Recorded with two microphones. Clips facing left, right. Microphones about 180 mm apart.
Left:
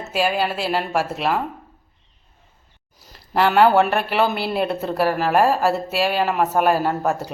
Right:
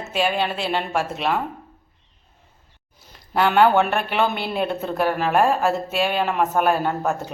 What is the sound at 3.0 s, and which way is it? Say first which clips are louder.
Speech: left 1 dB; centre (ahead or behind).